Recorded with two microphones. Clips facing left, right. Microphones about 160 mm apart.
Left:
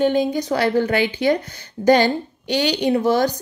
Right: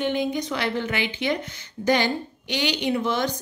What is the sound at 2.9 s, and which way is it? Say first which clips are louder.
Speech: left 9 dB; 35° left (ahead or behind).